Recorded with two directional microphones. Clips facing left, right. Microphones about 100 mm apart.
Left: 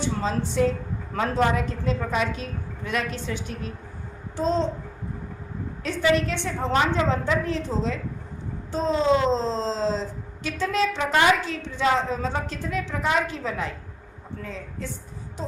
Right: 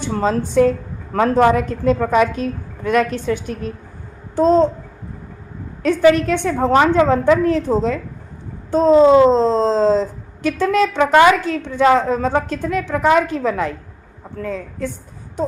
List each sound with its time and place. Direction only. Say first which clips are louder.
0.0 s speech: right 7 dB; 55° right (ahead or behind)
1.1 s a woman's voice: right 9 dB; 65° right (ahead or behind)
1.5 s speech: right 9 dB; 50° right (ahead or behind)
5.8 s a woman's voice: right 9 dB; 55° right (ahead or behind)